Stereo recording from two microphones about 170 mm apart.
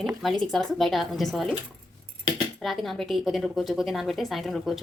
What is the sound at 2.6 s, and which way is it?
A woman's voice, centre (ahead or behind).